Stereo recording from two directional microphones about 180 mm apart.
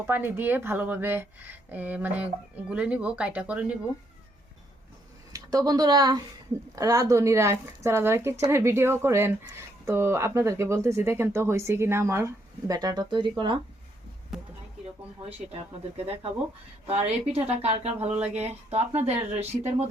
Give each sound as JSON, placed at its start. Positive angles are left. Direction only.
{"t": 0.1, "sound": "a woman's voice", "side_deg": -10}
{"t": 5.3, "sound": "a woman's voice", "side_deg": -20}
{"t": 16.8, "sound": "a woman's voice", "side_deg": -35}